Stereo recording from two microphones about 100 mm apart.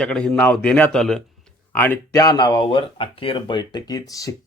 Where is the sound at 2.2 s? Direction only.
40° left (ahead or behind).